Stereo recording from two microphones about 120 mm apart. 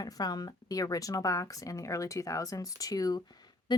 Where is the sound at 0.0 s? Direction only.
35° left (ahead or behind).